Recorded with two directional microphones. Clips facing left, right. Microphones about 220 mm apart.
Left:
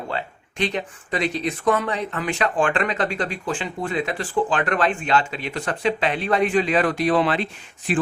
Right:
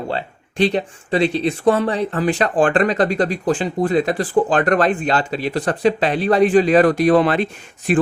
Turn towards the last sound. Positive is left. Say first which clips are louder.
# right 6 dB
turn(degrees=-45)  # may be behind; listen again after turning